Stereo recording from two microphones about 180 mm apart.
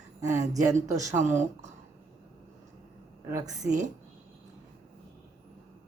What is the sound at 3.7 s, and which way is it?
Speech, 45° right (ahead or behind).